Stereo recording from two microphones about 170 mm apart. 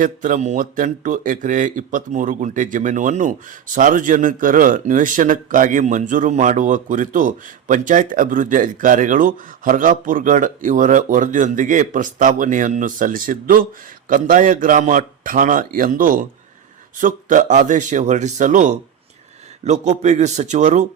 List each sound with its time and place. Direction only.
0.0 s a man's voice: 50° right (ahead or behind)